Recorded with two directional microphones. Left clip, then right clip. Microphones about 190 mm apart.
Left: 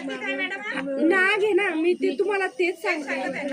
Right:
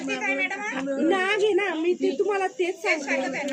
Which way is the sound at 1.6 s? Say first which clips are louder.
Left 2 dB; 30° right (ahead or behind).